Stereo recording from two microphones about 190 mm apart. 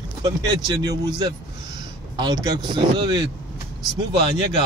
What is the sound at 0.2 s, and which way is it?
Speech, 20° right (ahead or behind).